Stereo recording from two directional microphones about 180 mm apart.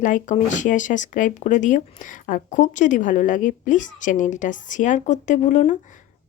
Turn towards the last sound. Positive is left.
turn(degrees=40)  # may be behind; listen again after turning